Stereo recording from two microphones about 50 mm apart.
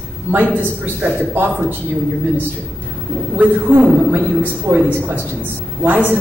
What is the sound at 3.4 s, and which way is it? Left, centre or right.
A man's voice, right.